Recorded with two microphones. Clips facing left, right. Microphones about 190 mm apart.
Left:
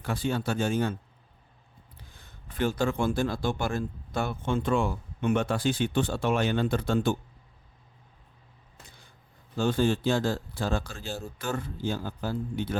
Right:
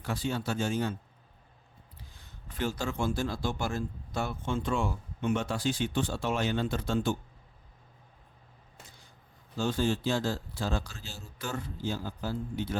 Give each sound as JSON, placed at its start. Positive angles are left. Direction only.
{"t": 0.0, "sound": "speech", "side_deg": 55}
{"t": 2.0, "sound": "speech", "side_deg": 50}
{"t": 9.6, "sound": "speech", "side_deg": 55}